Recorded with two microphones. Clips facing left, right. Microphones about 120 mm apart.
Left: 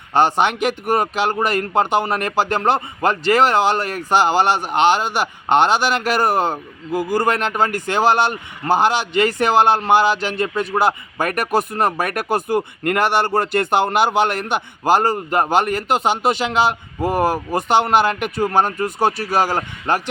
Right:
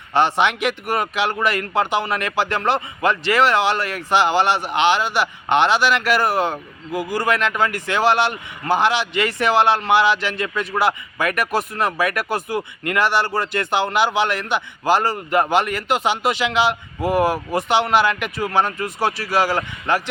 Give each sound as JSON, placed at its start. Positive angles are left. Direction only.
{"t": 0.2, "sound": "speech", "side_deg": 40}